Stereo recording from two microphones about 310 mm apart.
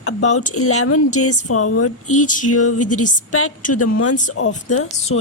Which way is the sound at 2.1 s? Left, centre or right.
Left.